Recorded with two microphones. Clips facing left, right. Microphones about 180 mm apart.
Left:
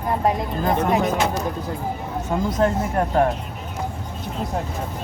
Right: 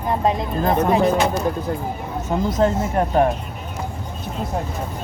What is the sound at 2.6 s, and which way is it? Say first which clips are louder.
Speech: right 2 dB; 20° right (ahead or behind).